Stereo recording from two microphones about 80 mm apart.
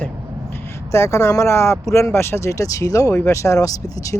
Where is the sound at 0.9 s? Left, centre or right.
Left.